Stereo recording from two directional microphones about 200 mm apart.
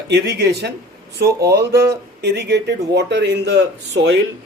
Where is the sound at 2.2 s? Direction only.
60° right (ahead or behind).